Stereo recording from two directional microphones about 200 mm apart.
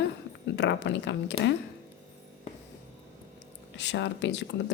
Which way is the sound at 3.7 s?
60° left (ahead or behind).